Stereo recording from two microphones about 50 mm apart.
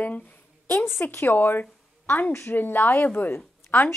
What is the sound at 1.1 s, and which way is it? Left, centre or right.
A woman's voice, left.